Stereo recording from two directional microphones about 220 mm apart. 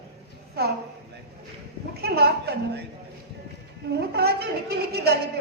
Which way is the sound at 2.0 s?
45° right (ahead or behind).